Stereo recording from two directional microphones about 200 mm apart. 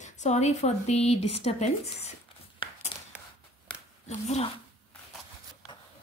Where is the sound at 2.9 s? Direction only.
25° left (ahead or behind).